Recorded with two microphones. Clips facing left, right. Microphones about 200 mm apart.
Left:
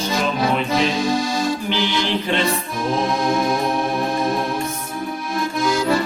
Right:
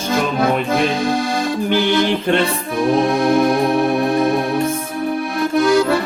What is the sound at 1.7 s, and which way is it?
Music, 55° right (ahead or behind).